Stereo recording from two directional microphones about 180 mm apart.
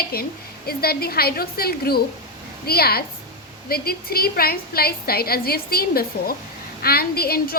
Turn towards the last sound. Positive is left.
turn(degrees=60)  # may be behind; listen again after turning